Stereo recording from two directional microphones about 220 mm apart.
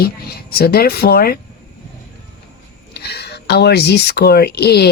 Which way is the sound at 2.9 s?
50° left (ahead or behind).